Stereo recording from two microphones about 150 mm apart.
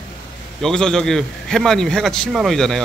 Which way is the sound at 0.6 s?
5° left (ahead or behind).